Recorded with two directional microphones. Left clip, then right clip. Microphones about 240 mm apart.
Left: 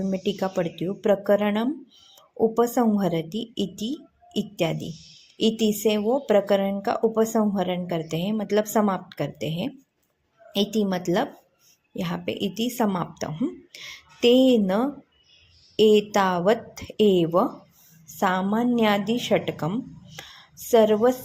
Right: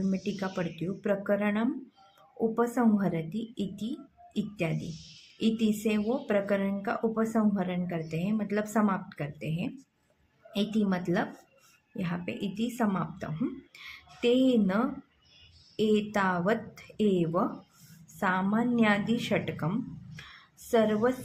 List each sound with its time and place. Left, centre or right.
0.1 s a woman's voice: left